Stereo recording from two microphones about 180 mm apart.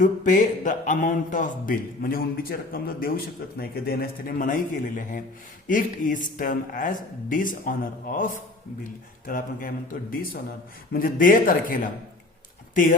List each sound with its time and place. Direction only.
0.0 s a man's voice: 45° left (ahead or behind)